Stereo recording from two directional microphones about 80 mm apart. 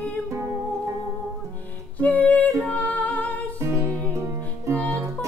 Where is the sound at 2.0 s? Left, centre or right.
Centre.